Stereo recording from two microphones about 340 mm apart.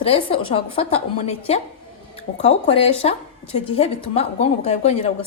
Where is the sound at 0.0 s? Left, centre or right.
Centre.